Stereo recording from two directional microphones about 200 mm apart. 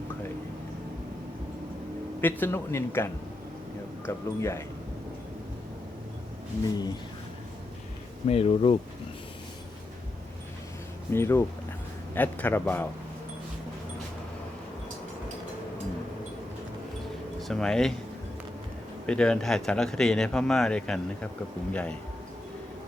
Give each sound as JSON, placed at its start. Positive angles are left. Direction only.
{"t": 2.2, "sound": "speech", "side_deg": 10}
{"t": 8.3, "sound": "speech", "side_deg": 30}
{"t": 11.1, "sound": "speech", "side_deg": 10}
{"t": 17.5, "sound": "speech", "side_deg": 5}
{"t": 19.0, "sound": "speech", "side_deg": 5}